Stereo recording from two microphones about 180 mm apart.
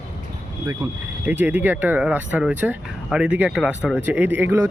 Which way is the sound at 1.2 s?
10° right (ahead or behind).